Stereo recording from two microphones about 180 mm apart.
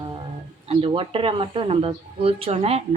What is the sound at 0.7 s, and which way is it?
Speech, 30° right (ahead or behind).